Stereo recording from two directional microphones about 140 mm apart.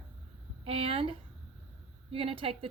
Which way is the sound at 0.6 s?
40° right (ahead or behind).